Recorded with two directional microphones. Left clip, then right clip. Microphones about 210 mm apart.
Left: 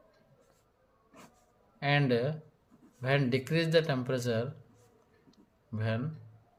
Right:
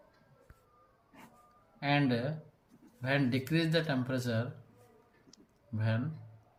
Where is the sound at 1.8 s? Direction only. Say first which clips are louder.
Left 3 dB; 50° left (ahead or behind).